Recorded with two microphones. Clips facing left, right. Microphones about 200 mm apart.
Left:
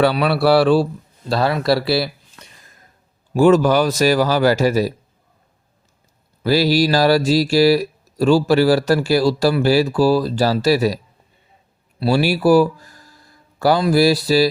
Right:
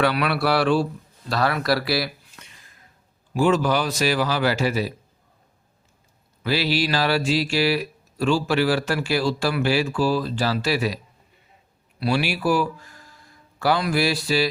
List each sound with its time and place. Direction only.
0.0 s speech: 30° left (ahead or behind)
2.5 s a sound: 40° left (ahead or behind)
3.3 s speech: 45° left (ahead or behind)
6.4 s speech: 40° left (ahead or behind)